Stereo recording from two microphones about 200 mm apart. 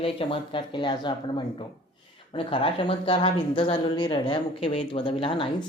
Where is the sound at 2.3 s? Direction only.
25° left (ahead or behind).